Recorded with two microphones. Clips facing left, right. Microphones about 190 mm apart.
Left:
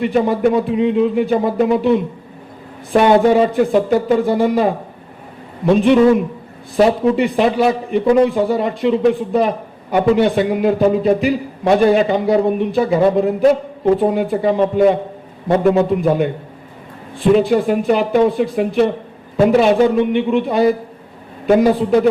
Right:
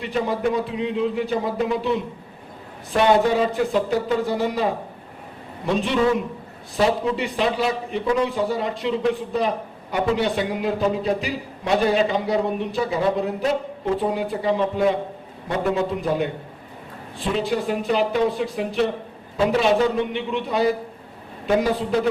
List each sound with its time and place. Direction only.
0.0 s a man's voice: 55° left (ahead or behind)